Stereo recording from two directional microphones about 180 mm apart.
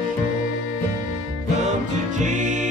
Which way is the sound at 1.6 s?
40° right (ahead or behind).